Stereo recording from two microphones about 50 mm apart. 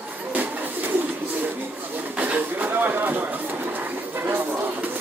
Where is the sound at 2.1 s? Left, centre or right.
Right.